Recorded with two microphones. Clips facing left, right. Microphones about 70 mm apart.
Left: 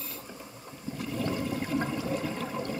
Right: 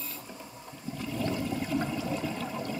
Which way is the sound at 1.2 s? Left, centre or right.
Centre.